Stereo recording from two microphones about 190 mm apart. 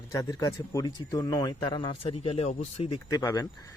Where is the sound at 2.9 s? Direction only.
20° left (ahead or behind).